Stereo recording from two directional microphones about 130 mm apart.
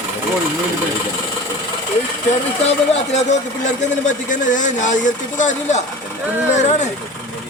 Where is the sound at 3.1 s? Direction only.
60° left (ahead or behind).